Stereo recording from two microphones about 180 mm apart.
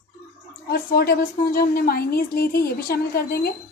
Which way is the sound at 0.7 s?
55° left (ahead or behind).